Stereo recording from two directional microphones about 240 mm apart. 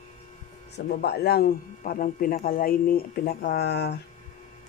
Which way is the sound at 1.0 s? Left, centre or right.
Left.